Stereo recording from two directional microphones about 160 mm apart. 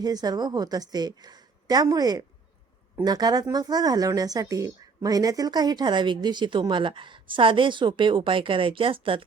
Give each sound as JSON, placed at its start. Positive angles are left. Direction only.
{"t": 0.0, "sound": "speech", "side_deg": -25}